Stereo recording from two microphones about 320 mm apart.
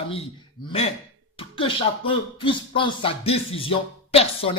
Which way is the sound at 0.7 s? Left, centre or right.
Centre.